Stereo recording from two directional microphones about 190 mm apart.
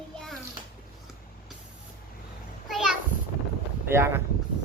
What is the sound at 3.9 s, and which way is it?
Speech, 15° right (ahead or behind).